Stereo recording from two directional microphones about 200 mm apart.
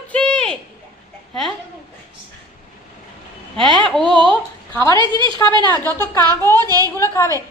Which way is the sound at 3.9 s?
5° left (ahead or behind).